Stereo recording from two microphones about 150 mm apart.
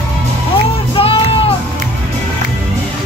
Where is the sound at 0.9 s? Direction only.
40° left (ahead or behind).